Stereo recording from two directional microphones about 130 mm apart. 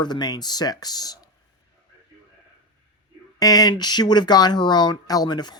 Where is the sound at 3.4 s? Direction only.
30° left (ahead or behind).